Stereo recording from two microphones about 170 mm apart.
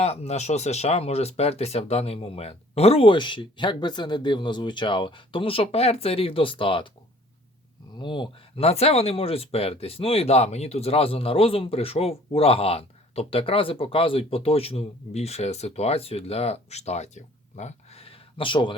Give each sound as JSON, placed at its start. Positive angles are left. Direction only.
{"t": 0.0, "sound": "speech", "side_deg": 40}
{"t": 7.9, "sound": "speech", "side_deg": 30}